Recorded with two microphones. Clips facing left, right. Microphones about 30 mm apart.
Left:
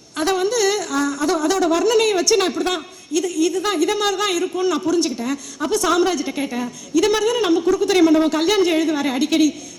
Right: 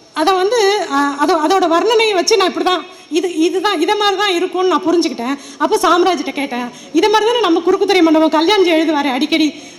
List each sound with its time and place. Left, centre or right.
0.2 s speech: right